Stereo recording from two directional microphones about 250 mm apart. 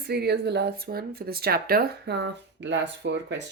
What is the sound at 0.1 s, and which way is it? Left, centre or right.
Speech, right.